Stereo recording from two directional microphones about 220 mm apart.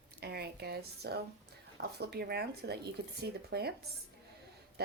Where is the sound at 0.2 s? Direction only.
45° right (ahead or behind).